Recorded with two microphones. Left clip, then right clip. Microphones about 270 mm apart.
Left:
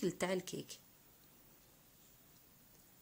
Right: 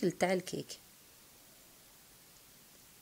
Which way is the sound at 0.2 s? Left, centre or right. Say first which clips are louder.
Right 6 dB; centre.